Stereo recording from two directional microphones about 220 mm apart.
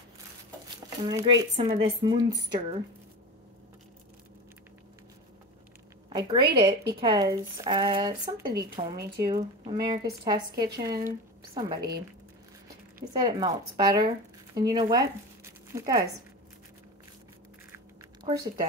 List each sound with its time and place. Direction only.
1.0 s speech: 20° right (ahead or behind)
6.0 s a woman's voice: 20° right (ahead or behind)
13.1 s a woman's voice: 20° right (ahead or behind)
17.7 s a sound: 15° right (ahead or behind)